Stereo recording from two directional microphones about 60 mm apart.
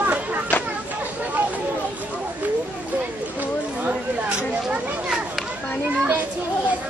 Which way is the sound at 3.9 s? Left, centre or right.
Right.